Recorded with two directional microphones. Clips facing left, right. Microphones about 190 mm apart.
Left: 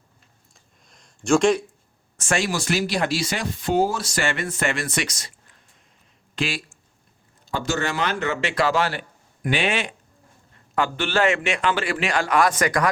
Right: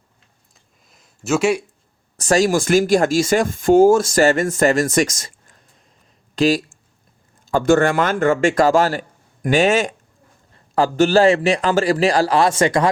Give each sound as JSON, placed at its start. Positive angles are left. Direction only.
{"t": 0.9, "sound": "a sound", "side_deg": -5}
{"t": 2.1, "sound": "speech", "side_deg": -40}
{"t": 7.4, "sound": "a man's voice", "side_deg": -50}